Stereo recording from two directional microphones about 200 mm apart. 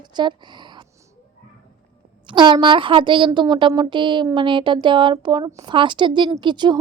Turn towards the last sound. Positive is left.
turn(degrees=-20)  # may be behind; listen again after turning